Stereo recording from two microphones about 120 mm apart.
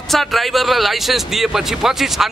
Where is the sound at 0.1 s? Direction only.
Centre (ahead or behind).